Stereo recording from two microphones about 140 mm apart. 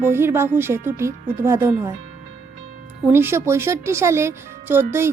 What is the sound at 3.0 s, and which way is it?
A woman's voice, 15° right (ahead or behind).